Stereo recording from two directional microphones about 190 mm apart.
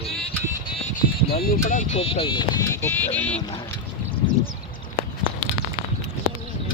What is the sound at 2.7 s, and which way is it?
Speech, 10° left (ahead or behind).